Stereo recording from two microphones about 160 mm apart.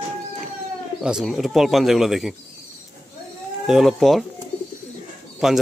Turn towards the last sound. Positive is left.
turn(degrees=0)  # may be behind; listen again after turning